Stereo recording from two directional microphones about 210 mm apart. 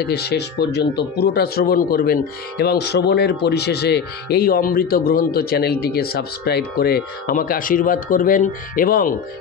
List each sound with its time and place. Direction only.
0.0 s speech: 50° left (ahead or behind)